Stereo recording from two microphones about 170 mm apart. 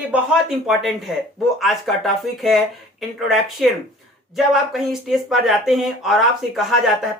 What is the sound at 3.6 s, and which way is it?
Speech, centre (ahead or behind).